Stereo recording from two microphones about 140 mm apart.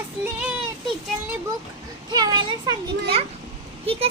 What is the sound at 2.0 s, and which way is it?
A child's voice, 30° right (ahead or behind).